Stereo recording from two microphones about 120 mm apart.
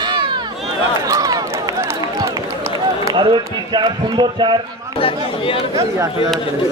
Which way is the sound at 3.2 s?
40° right (ahead or behind).